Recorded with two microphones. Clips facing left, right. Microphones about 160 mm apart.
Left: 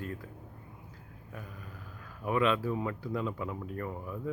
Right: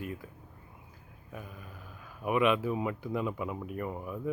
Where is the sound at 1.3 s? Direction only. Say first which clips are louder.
Right 1 dB; 15° right (ahead or behind).